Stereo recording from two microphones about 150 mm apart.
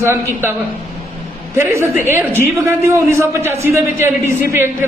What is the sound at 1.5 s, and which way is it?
A man's voice, 15° right (ahead or behind).